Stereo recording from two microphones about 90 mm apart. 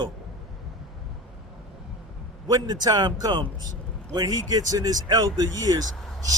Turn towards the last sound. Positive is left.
turn(degrees=0)  # may be behind; listen again after turning